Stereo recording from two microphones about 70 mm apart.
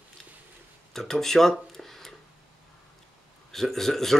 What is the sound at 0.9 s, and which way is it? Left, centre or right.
Speech, centre.